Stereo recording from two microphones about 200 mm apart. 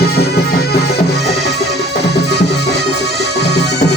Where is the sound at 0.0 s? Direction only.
50° left (ahead or behind).